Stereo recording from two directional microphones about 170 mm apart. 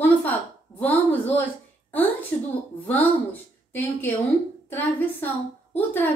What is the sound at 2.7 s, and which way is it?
A woman's voice, 10° left (ahead or behind).